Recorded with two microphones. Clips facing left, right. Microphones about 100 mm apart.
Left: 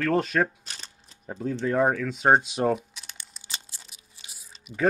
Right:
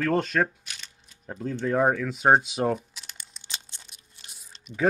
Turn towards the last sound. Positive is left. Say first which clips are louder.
# even
turn(degrees=0)  # may be behind; listen again after turning